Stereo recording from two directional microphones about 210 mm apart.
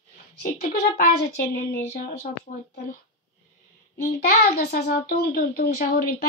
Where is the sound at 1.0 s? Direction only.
50° left (ahead or behind).